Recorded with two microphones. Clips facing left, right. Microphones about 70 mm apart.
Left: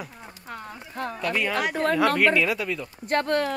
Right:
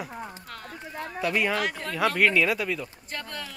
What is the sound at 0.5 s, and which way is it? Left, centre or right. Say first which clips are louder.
Clip-clop: left 3 dB; centre.